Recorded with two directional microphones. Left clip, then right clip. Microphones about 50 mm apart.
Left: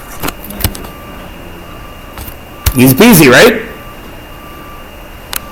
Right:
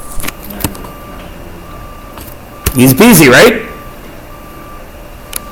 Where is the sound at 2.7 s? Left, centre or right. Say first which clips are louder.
Even; centre.